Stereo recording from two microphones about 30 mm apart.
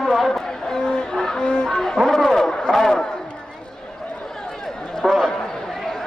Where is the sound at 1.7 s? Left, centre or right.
Centre.